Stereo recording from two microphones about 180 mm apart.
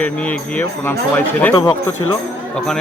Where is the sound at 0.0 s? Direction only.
10° left (ahead or behind).